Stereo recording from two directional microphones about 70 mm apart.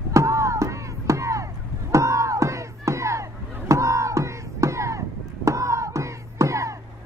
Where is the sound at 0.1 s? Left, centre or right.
Right.